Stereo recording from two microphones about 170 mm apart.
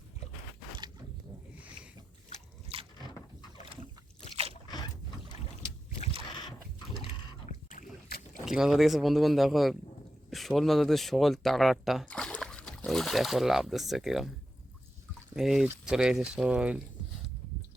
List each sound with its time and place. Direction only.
2.7 s a sound: 35° right (ahead or behind)
8.4 s speech: 5° right (ahead or behind)
15.4 s speech: centre (ahead or behind)